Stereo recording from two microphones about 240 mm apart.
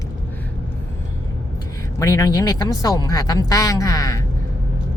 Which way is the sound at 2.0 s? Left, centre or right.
Centre.